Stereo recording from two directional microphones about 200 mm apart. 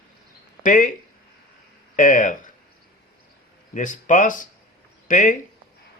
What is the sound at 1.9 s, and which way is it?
Speech, 40° left (ahead or behind).